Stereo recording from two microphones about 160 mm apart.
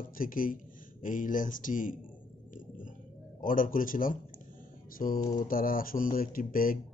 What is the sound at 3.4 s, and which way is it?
Speech, 60° left (ahead or behind).